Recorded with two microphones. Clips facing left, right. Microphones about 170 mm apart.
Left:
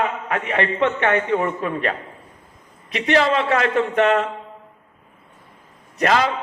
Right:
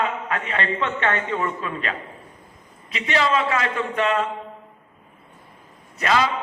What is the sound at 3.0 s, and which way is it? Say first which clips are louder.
A man's voice: left 3 dB; 50° left (ahead or behind).